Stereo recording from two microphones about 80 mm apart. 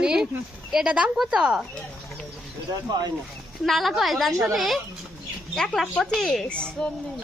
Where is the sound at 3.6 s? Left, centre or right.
Centre.